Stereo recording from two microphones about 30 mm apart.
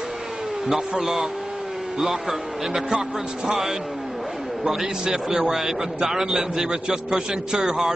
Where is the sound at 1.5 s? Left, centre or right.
Right.